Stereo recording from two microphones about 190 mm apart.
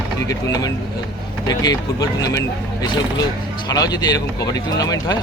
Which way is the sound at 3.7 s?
20° left (ahead or behind).